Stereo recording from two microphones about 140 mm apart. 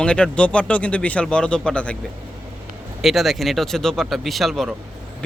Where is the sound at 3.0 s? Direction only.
Centre (ahead or behind).